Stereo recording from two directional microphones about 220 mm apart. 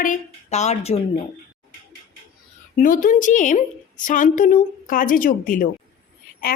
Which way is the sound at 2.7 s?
40° left (ahead or behind).